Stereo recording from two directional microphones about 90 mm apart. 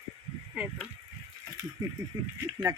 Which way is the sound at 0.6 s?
15° right (ahead or behind).